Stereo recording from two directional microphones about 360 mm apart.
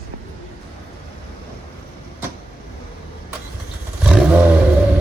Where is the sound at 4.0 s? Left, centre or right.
Centre.